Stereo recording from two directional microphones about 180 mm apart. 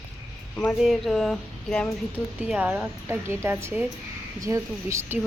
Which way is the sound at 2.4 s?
5° right (ahead or behind).